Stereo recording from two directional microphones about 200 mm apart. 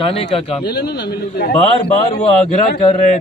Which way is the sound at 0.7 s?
55° left (ahead or behind).